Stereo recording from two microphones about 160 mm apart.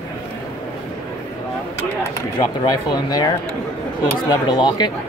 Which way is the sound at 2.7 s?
25° left (ahead or behind).